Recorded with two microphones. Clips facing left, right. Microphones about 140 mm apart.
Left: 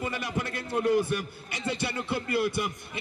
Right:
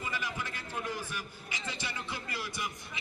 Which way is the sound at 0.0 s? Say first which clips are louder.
Left 6 dB; 65° left (ahead or behind).